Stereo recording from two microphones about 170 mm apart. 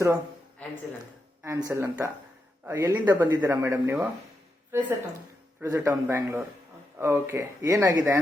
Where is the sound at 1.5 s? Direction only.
20° right (ahead or behind).